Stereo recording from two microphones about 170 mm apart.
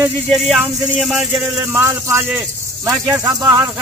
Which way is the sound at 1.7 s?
15° right (ahead or behind).